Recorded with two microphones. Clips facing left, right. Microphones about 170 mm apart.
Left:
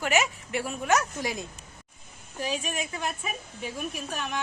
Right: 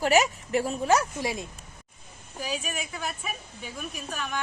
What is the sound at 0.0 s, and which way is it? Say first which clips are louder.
Speech: right 4 dB; 40° right (ahead or behind).